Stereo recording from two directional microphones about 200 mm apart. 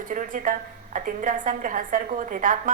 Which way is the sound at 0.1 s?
40° right (ahead or behind).